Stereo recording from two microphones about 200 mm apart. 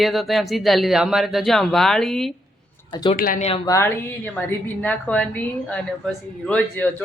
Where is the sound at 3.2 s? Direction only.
45° left (ahead or behind).